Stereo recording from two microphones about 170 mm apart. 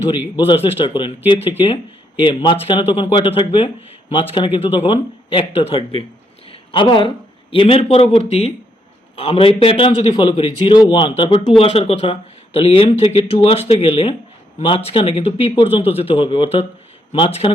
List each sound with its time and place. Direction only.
0.3 s speech: 30° left (ahead or behind)
6.5 s a sound: 30° left (ahead or behind)
7.5 s speech: 30° left (ahead or behind)